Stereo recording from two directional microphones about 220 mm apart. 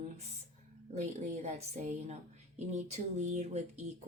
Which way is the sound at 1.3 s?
30° right (ahead or behind).